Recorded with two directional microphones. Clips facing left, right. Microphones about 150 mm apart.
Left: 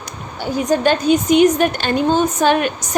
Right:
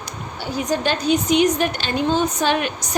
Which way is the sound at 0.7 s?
50° left (ahead or behind).